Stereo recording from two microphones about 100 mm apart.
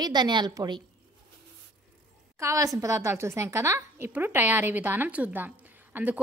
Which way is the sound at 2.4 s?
35° right (ahead or behind).